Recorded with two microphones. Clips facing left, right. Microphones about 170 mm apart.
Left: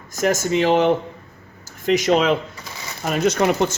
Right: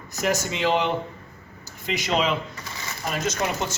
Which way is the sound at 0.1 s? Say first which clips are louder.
Left 6 dB; 45° left (ahead or behind).